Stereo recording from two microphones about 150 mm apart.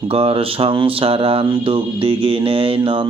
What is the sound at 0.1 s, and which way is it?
Speech, 40° right (ahead or behind).